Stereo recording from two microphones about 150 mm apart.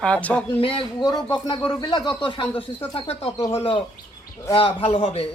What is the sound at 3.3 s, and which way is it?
Speech, 20° left (ahead or behind).